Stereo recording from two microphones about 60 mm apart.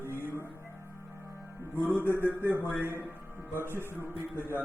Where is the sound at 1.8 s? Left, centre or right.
Right.